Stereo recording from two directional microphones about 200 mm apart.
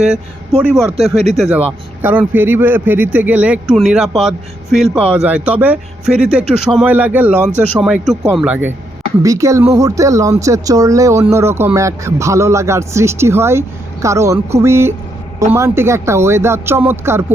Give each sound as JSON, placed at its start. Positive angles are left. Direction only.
{"t": 0.5, "sound": "a man's voice", "side_deg": 0}